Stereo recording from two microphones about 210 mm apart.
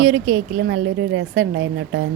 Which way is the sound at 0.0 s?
80° right.